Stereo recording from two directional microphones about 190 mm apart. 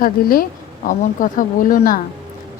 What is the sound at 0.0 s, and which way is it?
A woman's voice, 50° left (ahead or behind).